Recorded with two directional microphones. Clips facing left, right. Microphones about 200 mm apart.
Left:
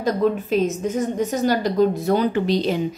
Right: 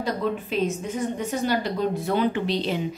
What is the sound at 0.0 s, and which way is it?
A woman's voice, 40° left (ahead or behind).